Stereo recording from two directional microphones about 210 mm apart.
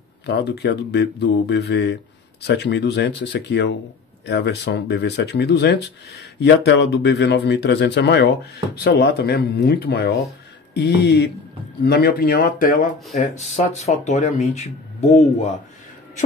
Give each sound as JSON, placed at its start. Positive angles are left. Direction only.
{"t": 0.3, "sound": "speech", "side_deg": 50}